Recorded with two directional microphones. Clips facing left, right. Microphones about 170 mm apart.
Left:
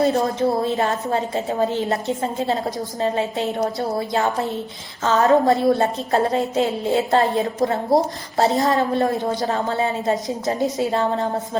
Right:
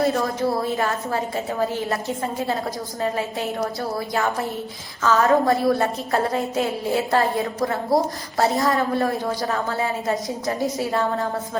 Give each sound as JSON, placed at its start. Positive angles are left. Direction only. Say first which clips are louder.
{"t": 0.0, "sound": "a woman's voice", "louder": "left 3 dB", "side_deg": 25}